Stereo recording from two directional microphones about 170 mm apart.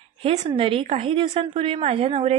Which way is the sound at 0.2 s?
35° right (ahead or behind).